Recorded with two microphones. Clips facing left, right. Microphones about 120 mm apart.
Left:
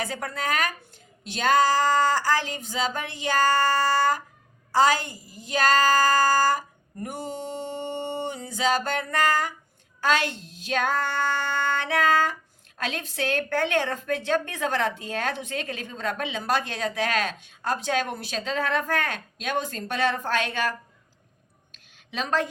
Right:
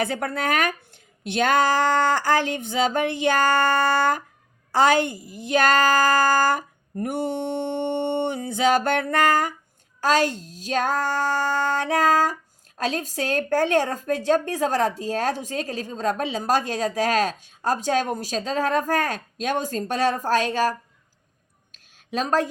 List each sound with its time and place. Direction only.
0.0 s speech: 50° right (ahead or behind)
10.0 s female singing: 40° right (ahead or behind)
21.7 s a sound: 40° right (ahead or behind)